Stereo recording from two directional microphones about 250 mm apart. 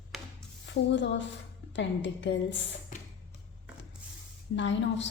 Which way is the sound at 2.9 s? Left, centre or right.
Left.